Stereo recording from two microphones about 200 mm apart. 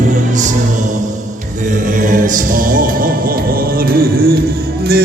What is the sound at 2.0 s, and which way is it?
Music, 40° right (ahead or behind).